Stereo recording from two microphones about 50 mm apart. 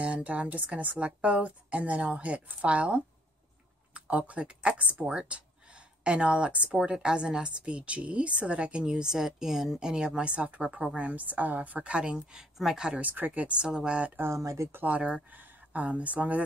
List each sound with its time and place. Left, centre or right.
0.0 s speech: right
11.1 s a woman's voice: right
12.0 s speech: centre
13.1 s a woman's voice: right
13.6 s speech: centre
14.2 s speech: right
14.9 s speech: right